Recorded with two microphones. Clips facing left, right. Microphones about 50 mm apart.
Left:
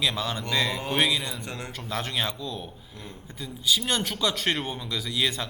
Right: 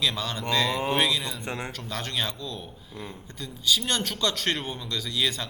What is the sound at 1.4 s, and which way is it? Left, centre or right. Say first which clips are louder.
Speech: right 3 dB; right.